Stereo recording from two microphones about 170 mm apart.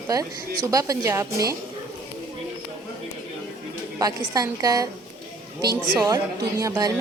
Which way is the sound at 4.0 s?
20° right (ahead or behind).